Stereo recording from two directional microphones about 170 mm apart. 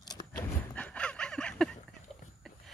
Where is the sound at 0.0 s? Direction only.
25° left (ahead or behind).